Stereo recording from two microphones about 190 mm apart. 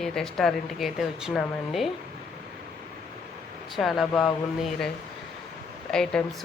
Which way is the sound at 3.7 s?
Centre (ahead or behind).